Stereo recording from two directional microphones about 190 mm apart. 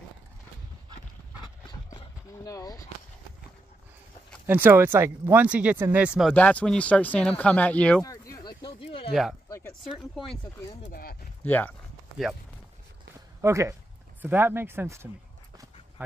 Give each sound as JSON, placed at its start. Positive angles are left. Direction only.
{"t": 1.9, "sound": "a sound", "side_deg": 20}
{"t": 4.5, "sound": "speech", "side_deg": -10}
{"t": 6.3, "sound": "speech", "side_deg": 5}
{"t": 8.0, "sound": "a sound", "side_deg": 20}
{"t": 10.8, "sound": "speech", "side_deg": 50}
{"t": 11.4, "sound": "speech", "side_deg": 10}
{"t": 13.4, "sound": "speech", "side_deg": -15}